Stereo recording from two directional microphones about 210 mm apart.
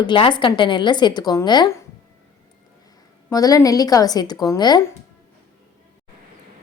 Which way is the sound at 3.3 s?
15° left (ahead or behind).